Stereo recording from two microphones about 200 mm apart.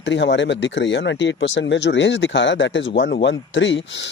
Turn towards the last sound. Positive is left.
turn(degrees=65)  # may be behind; listen again after turning